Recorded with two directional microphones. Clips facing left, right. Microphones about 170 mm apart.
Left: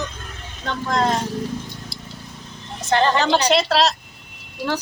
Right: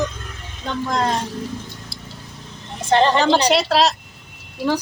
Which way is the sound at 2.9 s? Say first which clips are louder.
Right 3 dB; 30° right (ahead or behind).